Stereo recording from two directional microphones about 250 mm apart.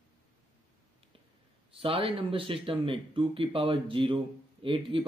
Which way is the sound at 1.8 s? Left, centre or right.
Right.